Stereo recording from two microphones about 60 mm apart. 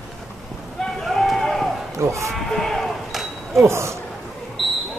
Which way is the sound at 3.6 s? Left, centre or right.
Right.